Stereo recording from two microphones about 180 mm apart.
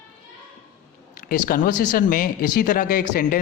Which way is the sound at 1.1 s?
55° left (ahead or behind).